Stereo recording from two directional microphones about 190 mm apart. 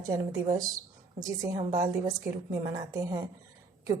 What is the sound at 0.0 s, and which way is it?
A woman's voice, 20° right (ahead or behind).